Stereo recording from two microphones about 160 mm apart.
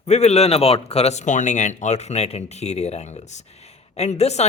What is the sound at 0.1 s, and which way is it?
Speech, 45° left (ahead or behind).